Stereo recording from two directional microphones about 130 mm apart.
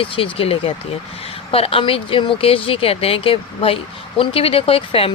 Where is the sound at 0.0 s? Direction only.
45° left (ahead or behind).